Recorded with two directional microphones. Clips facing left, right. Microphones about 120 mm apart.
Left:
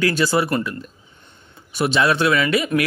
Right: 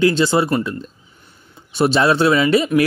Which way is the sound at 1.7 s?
30° right (ahead or behind).